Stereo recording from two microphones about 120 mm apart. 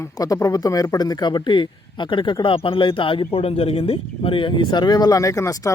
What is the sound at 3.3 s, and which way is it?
Speech, 60° left (ahead or behind).